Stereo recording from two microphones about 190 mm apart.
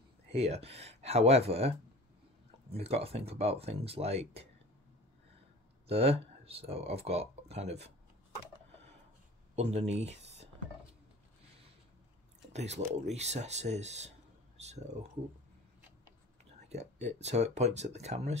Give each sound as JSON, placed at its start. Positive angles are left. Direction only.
{"t": 0.3, "sound": "speech", "side_deg": -30}
{"t": 2.7, "sound": "speech", "side_deg": -30}
{"t": 5.9, "sound": "speech", "side_deg": -30}
{"t": 9.6, "sound": "speech", "side_deg": -35}
{"t": 12.5, "sound": "speech", "side_deg": -35}
{"t": 16.6, "sound": "speech", "side_deg": -35}